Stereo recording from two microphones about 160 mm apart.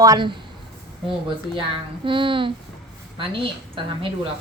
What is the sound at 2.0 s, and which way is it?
Speech, 30° right (ahead or behind).